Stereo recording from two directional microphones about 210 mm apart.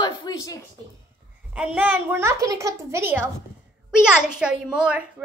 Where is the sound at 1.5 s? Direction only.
5° right (ahead or behind).